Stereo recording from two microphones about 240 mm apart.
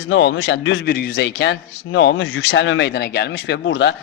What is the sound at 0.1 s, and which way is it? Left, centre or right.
A man's voice, left.